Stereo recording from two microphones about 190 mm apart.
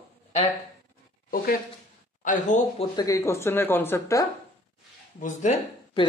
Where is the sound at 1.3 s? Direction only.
50° left (ahead or behind).